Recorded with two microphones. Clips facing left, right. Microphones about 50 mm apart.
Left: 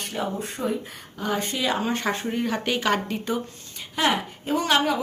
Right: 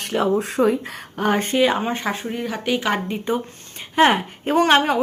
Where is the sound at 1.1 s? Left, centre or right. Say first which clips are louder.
Right 7 dB; right.